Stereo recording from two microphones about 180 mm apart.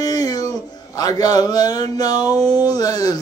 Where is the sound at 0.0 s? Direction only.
20° left (ahead or behind).